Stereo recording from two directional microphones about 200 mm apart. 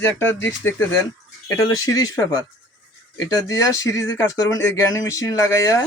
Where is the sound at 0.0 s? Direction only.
10° left (ahead or behind).